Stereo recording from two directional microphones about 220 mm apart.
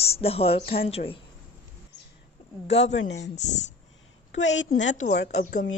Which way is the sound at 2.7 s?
30° left (ahead or behind).